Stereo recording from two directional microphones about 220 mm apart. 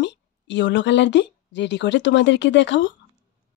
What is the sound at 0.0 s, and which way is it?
Speech, 55° left (ahead or behind).